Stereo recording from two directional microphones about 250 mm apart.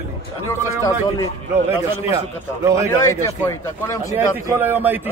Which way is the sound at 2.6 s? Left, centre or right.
Centre.